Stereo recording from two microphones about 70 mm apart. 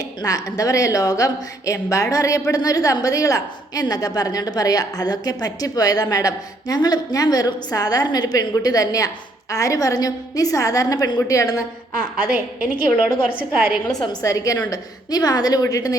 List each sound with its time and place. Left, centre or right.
0.0 s a woman's voice: left
11.2 s a woman's voice: left
12.2 s a woman's voice: right
14.3 s a woman's voice: left
14.7 s a woman's voice: left